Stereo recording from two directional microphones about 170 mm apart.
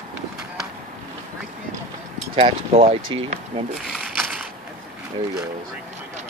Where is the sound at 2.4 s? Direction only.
35° right (ahead or behind).